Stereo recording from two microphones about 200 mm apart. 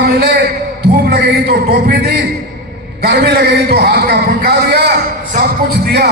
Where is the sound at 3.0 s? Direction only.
55° right (ahead or behind).